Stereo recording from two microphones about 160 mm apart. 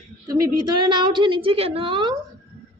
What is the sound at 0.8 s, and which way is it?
A woman's voice, 30° right (ahead or behind).